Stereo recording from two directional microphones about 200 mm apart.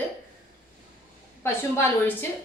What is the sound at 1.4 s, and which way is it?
Speech, 10° left (ahead or behind).